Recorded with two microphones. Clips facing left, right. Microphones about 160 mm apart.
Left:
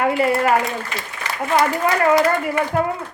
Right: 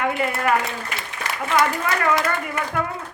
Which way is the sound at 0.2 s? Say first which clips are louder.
Left 5 dB; 30° left (ahead or behind).